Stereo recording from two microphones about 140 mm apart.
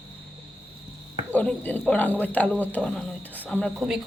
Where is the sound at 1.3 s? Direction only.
10° left (ahead or behind).